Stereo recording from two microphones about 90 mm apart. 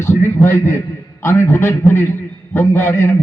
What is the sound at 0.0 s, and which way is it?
A man's voice, 30° left (ahead or behind).